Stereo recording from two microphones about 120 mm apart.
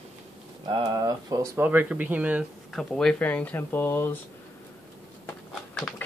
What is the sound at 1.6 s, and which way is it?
Speech, 15° right (ahead or behind).